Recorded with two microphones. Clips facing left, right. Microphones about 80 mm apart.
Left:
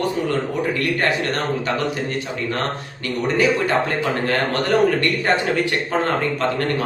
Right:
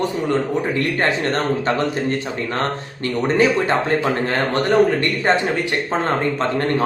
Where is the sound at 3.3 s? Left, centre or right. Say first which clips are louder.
Right 1 dB; right.